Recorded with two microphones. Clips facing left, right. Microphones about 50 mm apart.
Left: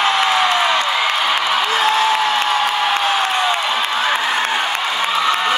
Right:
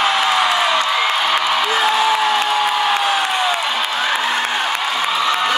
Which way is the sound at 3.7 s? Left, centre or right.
Centre.